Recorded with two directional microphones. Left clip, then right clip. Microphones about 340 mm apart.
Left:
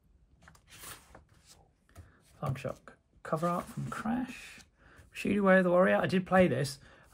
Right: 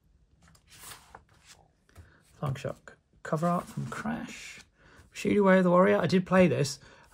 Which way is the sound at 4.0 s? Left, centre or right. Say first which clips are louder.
Left 1 dB; centre.